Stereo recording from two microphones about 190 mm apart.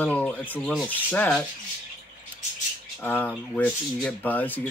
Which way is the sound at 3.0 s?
10° left (ahead or behind).